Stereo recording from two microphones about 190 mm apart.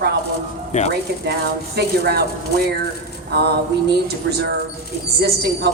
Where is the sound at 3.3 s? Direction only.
60° right (ahead or behind).